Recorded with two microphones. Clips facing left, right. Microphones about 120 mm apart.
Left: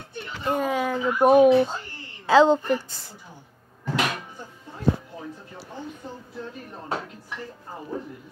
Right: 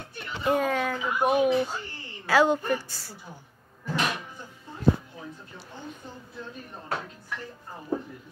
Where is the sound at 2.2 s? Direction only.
25° left (ahead or behind).